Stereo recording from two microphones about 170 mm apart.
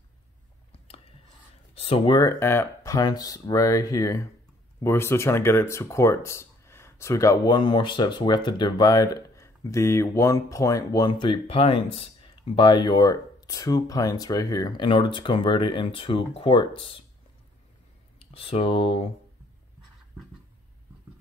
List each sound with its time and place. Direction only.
1.8 s speech: 30° left (ahead or behind)
18.2 s speech: 35° left (ahead or behind)